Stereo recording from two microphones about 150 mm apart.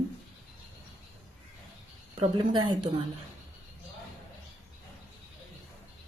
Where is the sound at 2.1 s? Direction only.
35° right (ahead or behind).